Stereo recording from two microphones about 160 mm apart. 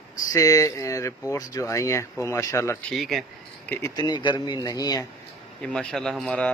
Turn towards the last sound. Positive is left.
turn(degrees=5)  # may be behind; listen again after turning